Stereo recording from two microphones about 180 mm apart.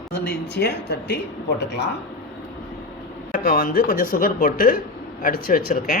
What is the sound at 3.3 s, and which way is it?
Speech, 55° left (ahead or behind).